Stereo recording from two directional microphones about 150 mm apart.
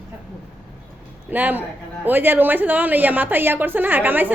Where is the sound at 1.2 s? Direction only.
10° right (ahead or behind).